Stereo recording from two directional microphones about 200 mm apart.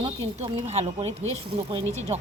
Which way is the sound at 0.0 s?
30° right (ahead or behind).